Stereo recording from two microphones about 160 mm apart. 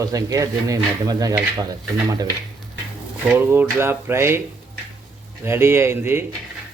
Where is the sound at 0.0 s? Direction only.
20° right (ahead or behind).